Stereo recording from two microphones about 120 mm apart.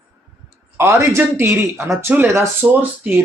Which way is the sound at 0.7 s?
20° right (ahead or behind).